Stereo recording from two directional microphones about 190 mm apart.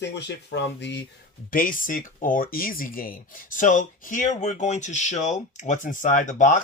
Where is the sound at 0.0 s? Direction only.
65° left (ahead or behind).